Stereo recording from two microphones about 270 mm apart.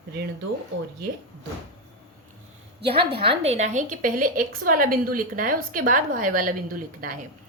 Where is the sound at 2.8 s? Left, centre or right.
Centre.